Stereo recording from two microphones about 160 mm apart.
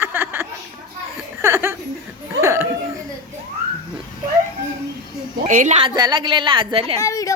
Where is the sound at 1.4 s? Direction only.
15° right (ahead or behind).